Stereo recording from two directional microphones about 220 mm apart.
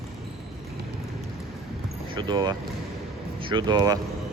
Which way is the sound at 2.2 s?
20° right (ahead or behind).